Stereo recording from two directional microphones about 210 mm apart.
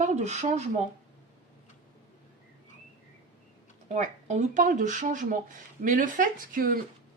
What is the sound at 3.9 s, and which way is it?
Speech, 35° right (ahead or behind).